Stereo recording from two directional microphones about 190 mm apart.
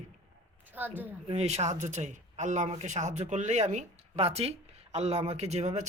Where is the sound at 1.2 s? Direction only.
35° right (ahead or behind).